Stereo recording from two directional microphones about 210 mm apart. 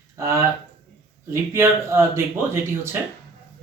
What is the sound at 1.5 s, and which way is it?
Speech, 10° right (ahead or behind).